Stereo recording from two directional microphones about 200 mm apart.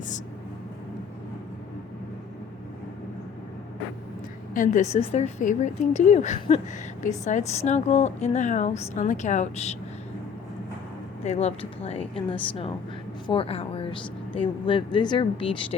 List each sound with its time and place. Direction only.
4.5 s a woman's voice: 40° left (ahead or behind)
11.2 s a woman's voice: 30° left (ahead or behind)